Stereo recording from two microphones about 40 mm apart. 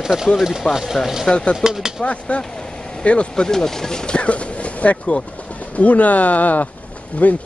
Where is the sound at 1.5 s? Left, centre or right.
Centre.